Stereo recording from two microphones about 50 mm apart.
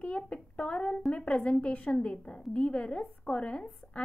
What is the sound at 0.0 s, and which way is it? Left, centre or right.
A woman's voice, left.